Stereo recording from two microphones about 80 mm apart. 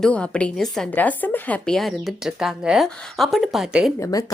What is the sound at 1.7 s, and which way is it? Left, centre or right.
Speech, centre.